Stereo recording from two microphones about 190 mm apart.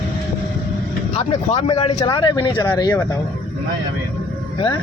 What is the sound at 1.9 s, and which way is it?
Speech, 20° left (ahead or behind).